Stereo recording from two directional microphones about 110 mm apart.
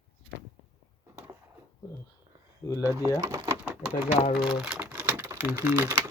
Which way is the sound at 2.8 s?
25° right (ahead or behind).